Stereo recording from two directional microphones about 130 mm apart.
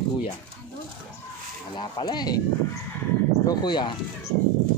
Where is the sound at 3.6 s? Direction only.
35° left (ahead or behind).